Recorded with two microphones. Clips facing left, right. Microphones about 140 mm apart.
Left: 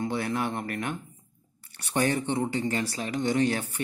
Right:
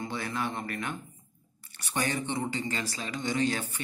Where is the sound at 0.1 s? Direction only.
60° left (ahead or behind).